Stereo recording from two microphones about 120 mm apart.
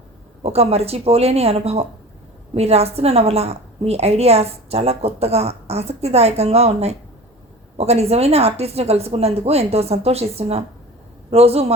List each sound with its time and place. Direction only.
0.4 s a woman's voice: 60° right (ahead or behind)